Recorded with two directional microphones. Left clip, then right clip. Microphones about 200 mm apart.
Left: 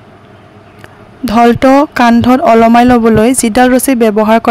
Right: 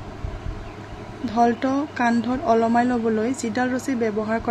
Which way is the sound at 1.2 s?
50° left (ahead or behind).